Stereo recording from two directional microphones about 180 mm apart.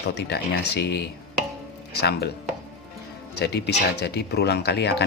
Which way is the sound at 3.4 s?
65° left (ahead or behind).